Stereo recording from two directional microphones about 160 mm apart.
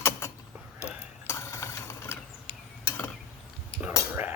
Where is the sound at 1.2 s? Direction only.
20° left (ahead or behind).